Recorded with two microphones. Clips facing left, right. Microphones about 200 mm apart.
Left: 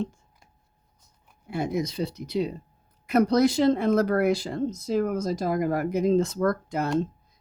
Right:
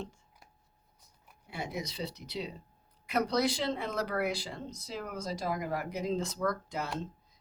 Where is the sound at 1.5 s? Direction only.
50° left (ahead or behind).